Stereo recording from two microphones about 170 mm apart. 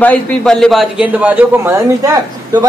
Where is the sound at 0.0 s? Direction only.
5° left (ahead or behind); by 2.1 s 10° right (ahead or behind).